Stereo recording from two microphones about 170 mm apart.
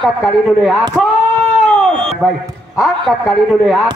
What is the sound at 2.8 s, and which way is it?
A man's voice, centre (ahead or behind).